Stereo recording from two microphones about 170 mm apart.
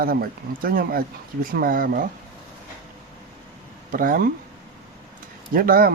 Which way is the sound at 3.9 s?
55° right (ahead or behind).